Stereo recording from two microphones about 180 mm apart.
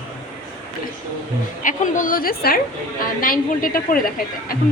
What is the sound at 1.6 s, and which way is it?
A woman's voice, 45° left (ahead or behind).